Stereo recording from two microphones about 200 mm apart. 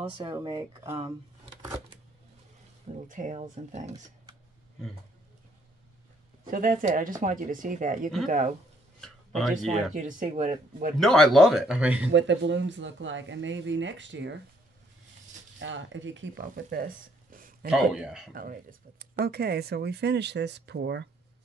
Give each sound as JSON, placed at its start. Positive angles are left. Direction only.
{"t": 0.2, "sound": "speech", "side_deg": -20}
{"t": 3.1, "sound": "speech", "side_deg": -40}
{"t": 6.4, "sound": "speech", "side_deg": -45}
{"t": 9.0, "sound": "speech", "side_deg": 0}
{"t": 9.9, "sound": "speech", "side_deg": -40}
{"t": 11.0, "sound": "speech", "side_deg": 0}
{"t": 12.1, "sound": "speech", "side_deg": -65}
{"t": 15.6, "sound": "speech", "side_deg": -70}
{"t": 17.6, "sound": "speech", "side_deg": -5}
{"t": 18.3, "sound": "speech", "side_deg": -45}